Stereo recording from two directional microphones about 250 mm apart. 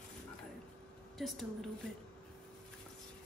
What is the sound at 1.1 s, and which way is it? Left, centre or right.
Speech, centre.